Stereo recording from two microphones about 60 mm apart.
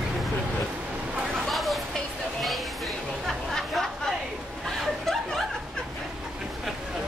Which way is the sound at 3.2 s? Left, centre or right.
Centre.